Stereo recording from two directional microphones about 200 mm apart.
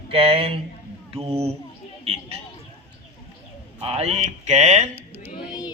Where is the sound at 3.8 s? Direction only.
30° right (ahead or behind).